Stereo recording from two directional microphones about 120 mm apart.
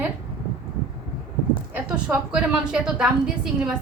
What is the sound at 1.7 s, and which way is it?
A woman's voice, 10° right (ahead or behind).